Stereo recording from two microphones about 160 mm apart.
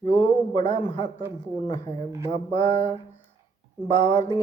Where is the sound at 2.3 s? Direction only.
25° left (ahead or behind).